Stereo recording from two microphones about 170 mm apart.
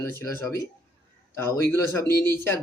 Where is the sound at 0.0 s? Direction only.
15° left (ahead or behind).